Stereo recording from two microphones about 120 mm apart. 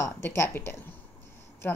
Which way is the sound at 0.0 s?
20° left (ahead or behind).